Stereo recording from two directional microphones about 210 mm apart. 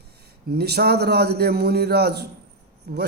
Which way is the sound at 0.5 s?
50° right (ahead or behind).